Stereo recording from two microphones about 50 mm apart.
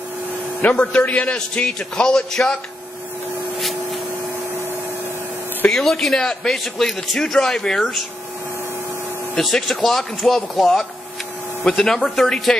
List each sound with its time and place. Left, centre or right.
0.6 s a man's voice: left
1.0 s a man's voice: left
1.5 s a man's voice: centre
3.5 s a sound: centre
5.7 s a man's voice: centre
9.4 s a man's voice: centre